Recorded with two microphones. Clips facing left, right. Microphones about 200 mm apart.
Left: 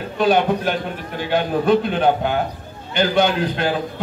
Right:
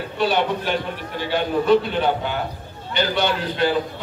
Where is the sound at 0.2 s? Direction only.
50° left (ahead or behind).